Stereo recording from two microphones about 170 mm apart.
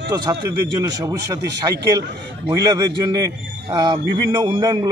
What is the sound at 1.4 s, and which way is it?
Speech, 75° right (ahead or behind).